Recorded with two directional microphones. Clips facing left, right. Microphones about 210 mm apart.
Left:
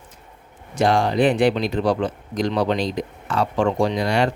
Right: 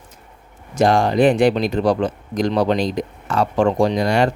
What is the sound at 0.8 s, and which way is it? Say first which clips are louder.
Speech: right 3 dB; 45° right (ahead or behind).